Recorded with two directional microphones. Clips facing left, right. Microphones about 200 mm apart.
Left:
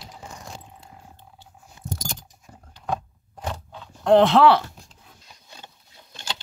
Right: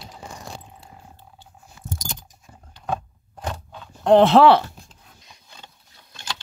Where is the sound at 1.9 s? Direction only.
50° left (ahead or behind).